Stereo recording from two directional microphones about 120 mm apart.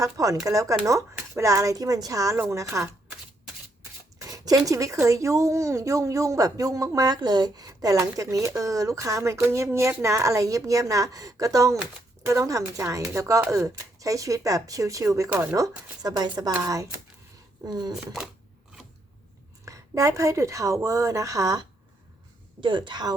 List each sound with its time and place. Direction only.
0.0 s speech: 30° right (ahead or behind)
4.2 s speech: 30° right (ahead or behind)
17.7 s a woman's voice: 35° right (ahead or behind)
17.9 s speech: 5° right (ahead or behind)
19.6 s a woman's voice: 25° right (ahead or behind)